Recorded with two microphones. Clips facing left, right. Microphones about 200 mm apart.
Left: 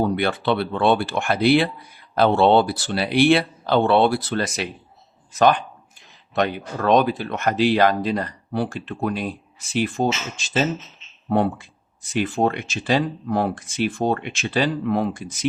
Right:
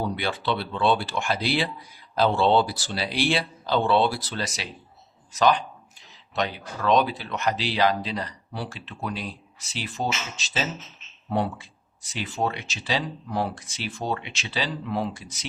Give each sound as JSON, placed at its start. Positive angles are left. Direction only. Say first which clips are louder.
{"t": 0.0, "sound": "speech", "louder": "left 7 dB", "side_deg": 55}